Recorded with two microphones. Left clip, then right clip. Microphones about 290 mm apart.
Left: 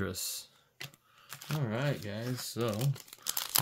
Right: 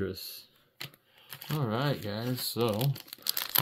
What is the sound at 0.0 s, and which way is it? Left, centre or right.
Speech, left.